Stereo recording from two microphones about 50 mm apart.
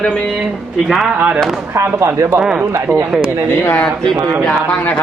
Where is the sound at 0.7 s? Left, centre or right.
Centre.